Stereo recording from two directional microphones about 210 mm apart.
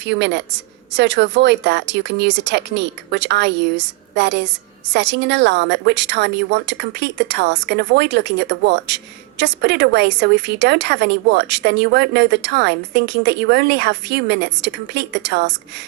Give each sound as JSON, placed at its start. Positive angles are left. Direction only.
{"t": 0.0, "sound": "a woman's voice", "side_deg": -55}